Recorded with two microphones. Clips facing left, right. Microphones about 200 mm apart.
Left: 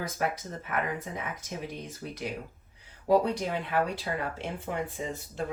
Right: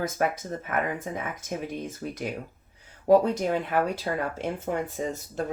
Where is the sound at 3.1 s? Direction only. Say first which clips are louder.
Right 5 dB; 45° right (ahead or behind).